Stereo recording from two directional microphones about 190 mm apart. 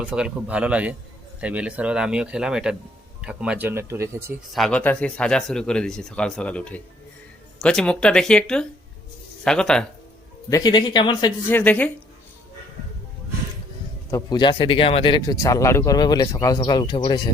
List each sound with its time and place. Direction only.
0.0 s speech: 5° right (ahead or behind)
4.5 s speech: 5° left (ahead or behind)
10.5 s speech: 20° left (ahead or behind)
11.5 s a woman's voice: 10° left (ahead or behind)
14.1 s speech: 20° left (ahead or behind)